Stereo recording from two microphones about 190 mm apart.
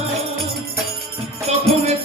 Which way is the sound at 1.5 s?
35° right (ahead or behind).